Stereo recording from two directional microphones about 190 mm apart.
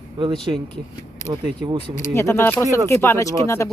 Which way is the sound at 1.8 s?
40° left (ahead or behind).